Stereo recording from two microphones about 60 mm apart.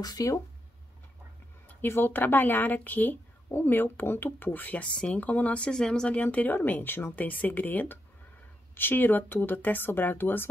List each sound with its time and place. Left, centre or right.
0.0 s speech: left
1.7 s speech: left
5.7 s speech: centre
6.0 s speech: left